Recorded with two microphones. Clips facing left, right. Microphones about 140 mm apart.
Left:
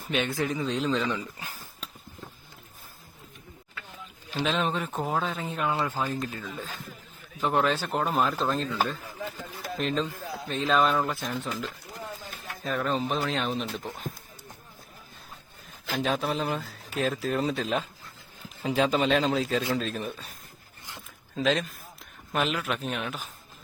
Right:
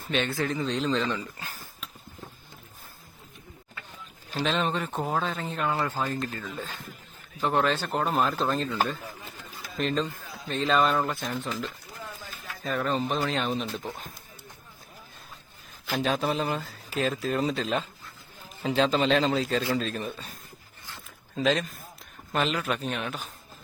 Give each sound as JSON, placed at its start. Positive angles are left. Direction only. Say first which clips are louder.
{"t": 0.1, "sound": "speech", "louder": "even", "side_deg": 15}
{"t": 4.4, "sound": "speech", "louder": "even", "side_deg": 0}
{"t": 9.2, "sound": "a sound", "louder": "left 7 dB", "side_deg": 65}
{"t": 9.7, "sound": "speech", "louder": "right 1 dB", "side_deg": 0}
{"t": 12.6, "sound": "speech", "louder": "even", "side_deg": 0}
{"t": 16.0, "sound": "speech", "louder": "right 1 dB", "side_deg": 0}
{"t": 21.3, "sound": "speech", "louder": "right 1 dB", "side_deg": 0}